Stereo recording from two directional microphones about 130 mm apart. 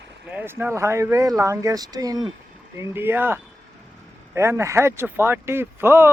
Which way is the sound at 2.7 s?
15° right (ahead or behind).